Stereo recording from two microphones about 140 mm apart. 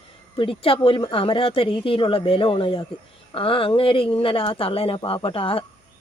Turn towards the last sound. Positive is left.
turn(degrees=40)  # may be behind; listen again after turning